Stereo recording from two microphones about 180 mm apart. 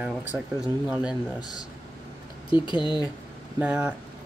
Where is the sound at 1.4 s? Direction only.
20° left (ahead or behind).